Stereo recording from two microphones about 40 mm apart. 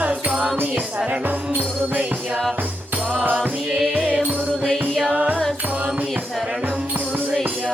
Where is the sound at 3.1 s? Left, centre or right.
Right.